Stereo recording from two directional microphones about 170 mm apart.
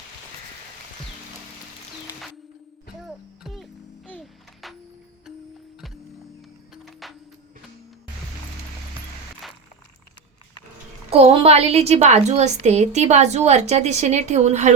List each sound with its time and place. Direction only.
3.0 s music: centre (ahead or behind)
6.8 s music: centre (ahead or behind)
9.4 s a sound: centre (ahead or behind)
11.1 s a woman's voice: 35° right (ahead or behind)